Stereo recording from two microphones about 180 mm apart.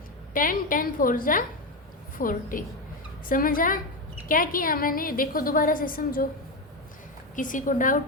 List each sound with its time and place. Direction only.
0.3 s a woman's voice: 50° left (ahead or behind)
7.3 s a woman's voice: 45° left (ahead or behind)